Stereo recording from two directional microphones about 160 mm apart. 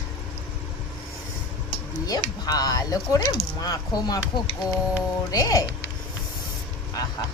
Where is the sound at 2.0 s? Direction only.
25° left (ahead or behind).